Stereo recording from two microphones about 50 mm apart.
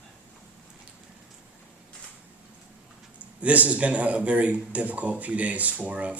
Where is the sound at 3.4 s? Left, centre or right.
Right.